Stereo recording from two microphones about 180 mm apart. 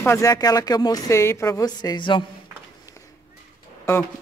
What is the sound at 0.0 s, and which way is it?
A woman's voice, 15° left (ahead or behind).